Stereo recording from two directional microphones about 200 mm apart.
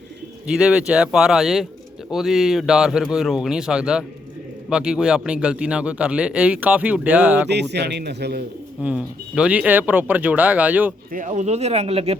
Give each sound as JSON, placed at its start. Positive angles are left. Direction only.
{"t": 0.4, "sound": "a man's voice", "side_deg": -5}
{"t": 7.4, "sound": "a man's voice", "side_deg": -55}
{"t": 8.8, "sound": "speech", "side_deg": -5}
{"t": 11.1, "sound": "speech", "side_deg": -40}